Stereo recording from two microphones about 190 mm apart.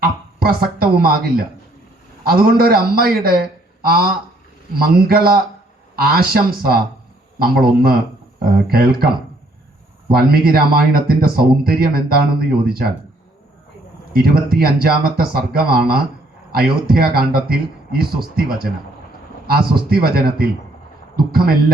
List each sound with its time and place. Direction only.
0.0 s speech: 50° right (ahead or behind)
10.1 s speech: 50° right (ahead or behind)
14.1 s speech: 50° right (ahead or behind)